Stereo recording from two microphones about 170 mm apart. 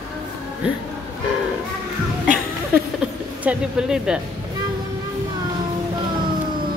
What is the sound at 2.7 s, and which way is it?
Music, 10° right (ahead or behind).